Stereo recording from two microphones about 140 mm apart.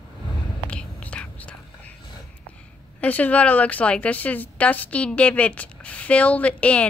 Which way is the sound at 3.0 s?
10° left (ahead or behind).